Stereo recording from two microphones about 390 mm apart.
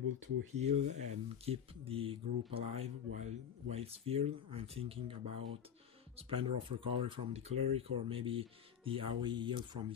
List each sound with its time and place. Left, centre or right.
0.0 s speech: right
0.6 s speech: centre